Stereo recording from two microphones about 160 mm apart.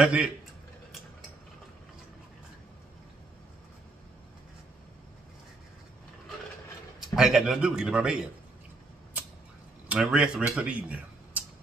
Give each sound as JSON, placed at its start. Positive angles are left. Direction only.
{"t": 0.0, "sound": "a man's voice", "side_deg": -5}
{"t": 7.0, "sound": "a man's voice", "side_deg": 0}
{"t": 9.8, "sound": "speech", "side_deg": -5}